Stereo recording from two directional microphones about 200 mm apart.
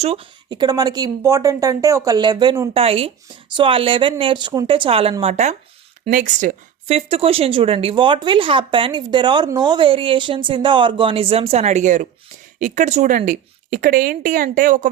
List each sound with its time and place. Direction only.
0.0 s a woman's voice: 30° right (ahead or behind)